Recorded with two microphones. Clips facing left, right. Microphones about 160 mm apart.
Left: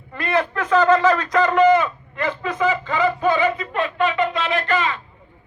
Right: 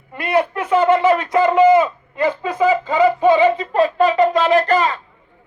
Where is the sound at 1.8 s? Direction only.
25° right (ahead or behind).